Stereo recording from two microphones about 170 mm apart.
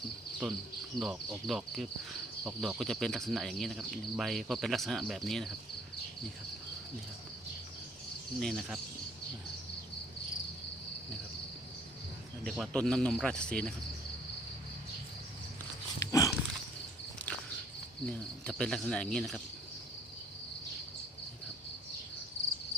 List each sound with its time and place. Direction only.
0.4 s speech: centre (ahead or behind)
8.4 s speech: centre (ahead or behind)
12.5 s speech: centre (ahead or behind)
16.0 s dog: 20° left (ahead or behind)
18.0 s speech: 5° left (ahead or behind)